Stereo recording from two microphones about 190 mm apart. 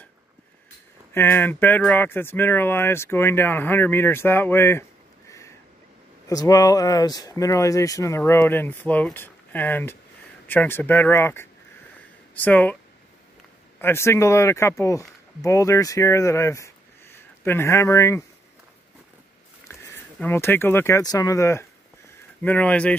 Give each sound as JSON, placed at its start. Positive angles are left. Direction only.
{"t": 1.1, "sound": "speech", "side_deg": 10}
{"t": 6.2, "sound": "speech", "side_deg": 20}
{"t": 13.7, "sound": "speech", "side_deg": 15}
{"t": 19.9, "sound": "speech", "side_deg": 10}